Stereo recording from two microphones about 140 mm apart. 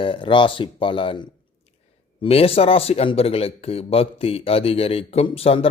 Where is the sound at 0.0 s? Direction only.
35° left (ahead or behind).